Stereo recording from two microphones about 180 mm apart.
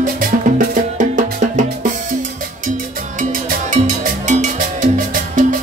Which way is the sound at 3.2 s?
45° right (ahead or behind).